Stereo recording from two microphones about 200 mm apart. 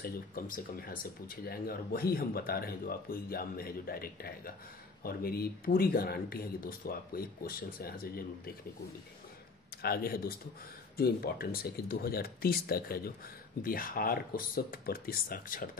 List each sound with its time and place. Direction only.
0.0 s speech: 45° left (ahead or behind)
9.8 s speech: 50° left (ahead or behind)